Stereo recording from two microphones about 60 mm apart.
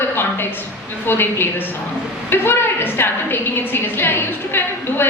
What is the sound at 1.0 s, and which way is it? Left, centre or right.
A woman's voice, left.